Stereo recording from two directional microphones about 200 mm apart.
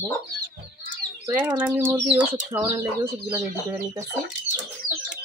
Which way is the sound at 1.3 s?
10° right (ahead or behind).